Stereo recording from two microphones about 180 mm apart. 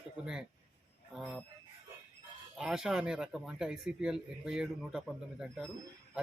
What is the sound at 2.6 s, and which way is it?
Speech, 5° right (ahead or behind).